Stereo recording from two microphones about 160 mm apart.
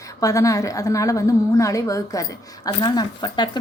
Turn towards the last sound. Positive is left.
turn(degrees=25)  # may be behind; listen again after turning